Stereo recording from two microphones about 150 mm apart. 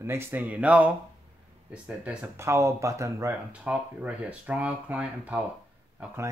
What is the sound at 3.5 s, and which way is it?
Speech, 10° right (ahead or behind).